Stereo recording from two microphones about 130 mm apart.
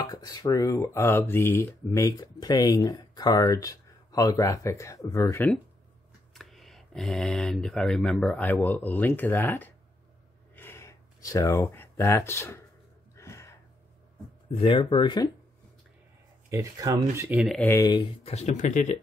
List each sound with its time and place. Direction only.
0.0 s speech: 30° left (ahead or behind)
6.3 s speech: centre (ahead or behind)
10.5 s a sound: 15° left (ahead or behind)
14.6 s speech: 40° left (ahead or behind)
16.4 s speech: 25° right (ahead or behind)
17.4 s speech: centre (ahead or behind)
17.6 s speech: 25° left (ahead or behind)
17.9 s speech: 40° left (ahead or behind)
18.3 s speech: 65° left (ahead or behind)